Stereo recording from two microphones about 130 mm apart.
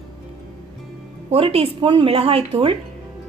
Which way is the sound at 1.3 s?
45° right (ahead or behind).